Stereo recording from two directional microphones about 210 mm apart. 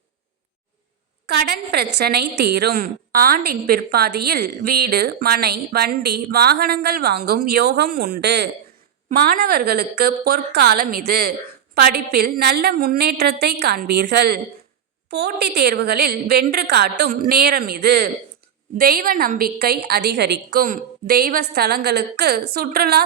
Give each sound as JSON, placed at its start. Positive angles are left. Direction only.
{"t": 1.3, "sound": "a woman's voice", "side_deg": -50}
{"t": 9.0, "sound": "a woman's voice", "side_deg": -45}